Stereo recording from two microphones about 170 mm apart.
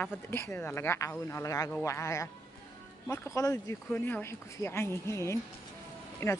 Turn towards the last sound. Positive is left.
turn(degrees=15)  # may be behind; listen again after turning